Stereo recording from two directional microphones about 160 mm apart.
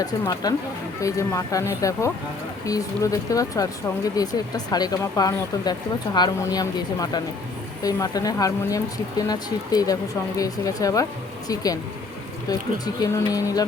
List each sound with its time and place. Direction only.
0.0 s speech: 25° left (ahead or behind)